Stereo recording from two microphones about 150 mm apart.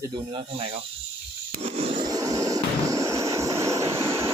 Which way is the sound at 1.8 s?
40° right (ahead or behind).